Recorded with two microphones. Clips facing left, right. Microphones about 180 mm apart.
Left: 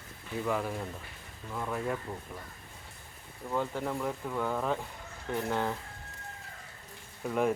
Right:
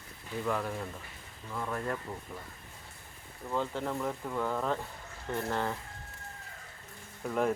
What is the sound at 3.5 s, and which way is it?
Speech, 5° left (ahead or behind).